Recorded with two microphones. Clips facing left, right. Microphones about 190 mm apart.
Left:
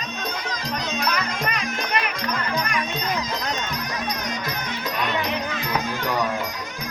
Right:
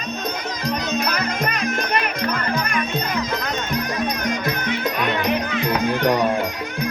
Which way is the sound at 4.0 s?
55° right (ahead or behind).